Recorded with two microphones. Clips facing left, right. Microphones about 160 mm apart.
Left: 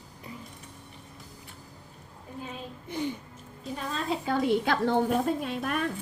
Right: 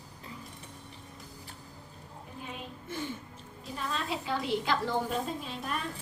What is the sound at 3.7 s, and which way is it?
Speech, 35° left (ahead or behind).